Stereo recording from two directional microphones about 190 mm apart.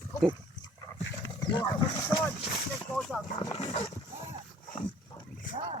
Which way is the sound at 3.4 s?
20° left (ahead or behind).